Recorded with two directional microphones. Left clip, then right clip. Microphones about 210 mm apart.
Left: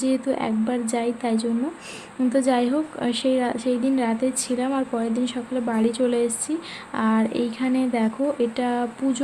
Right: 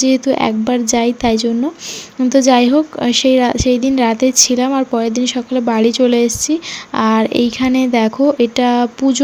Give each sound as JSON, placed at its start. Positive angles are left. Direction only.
{"t": 0.0, "sound": "a woman's voice", "side_deg": -30}